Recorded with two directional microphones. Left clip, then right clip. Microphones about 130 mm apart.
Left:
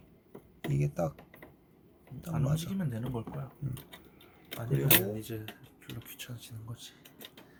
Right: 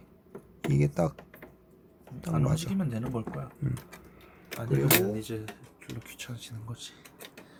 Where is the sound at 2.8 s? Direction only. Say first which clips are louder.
Right 4 dB; 5° right (ahead or behind).